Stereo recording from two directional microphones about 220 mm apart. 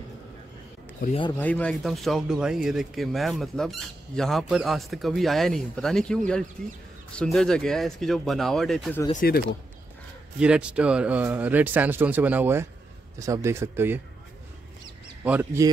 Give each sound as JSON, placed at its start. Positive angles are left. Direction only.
{"t": 1.4, "sound": "speech", "side_deg": 5}
{"t": 9.1, "sound": "speech", "side_deg": 40}
{"t": 10.4, "sound": "speech", "side_deg": -5}
{"t": 15.2, "sound": "speech", "side_deg": -10}